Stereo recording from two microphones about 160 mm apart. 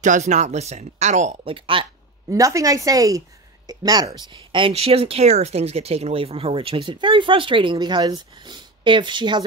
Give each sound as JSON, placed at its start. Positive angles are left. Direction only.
{"t": 0.0, "sound": "speech", "side_deg": -50}
{"t": 2.3, "sound": "a woman's voice", "side_deg": -20}